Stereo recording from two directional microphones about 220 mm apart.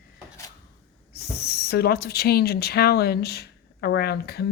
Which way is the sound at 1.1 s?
45° left (ahead or behind).